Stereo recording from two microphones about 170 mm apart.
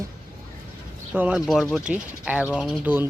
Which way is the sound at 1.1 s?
5° right (ahead or behind).